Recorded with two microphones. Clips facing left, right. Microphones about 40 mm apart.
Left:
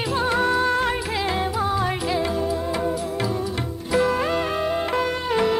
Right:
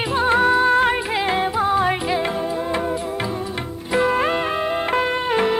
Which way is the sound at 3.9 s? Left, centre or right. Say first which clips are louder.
Right 2 dB; right.